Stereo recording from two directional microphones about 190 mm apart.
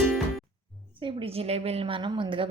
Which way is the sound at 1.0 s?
30° right (ahead or behind).